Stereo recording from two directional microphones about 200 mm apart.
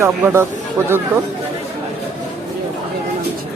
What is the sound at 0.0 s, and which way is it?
Speech, 15° right (ahead or behind).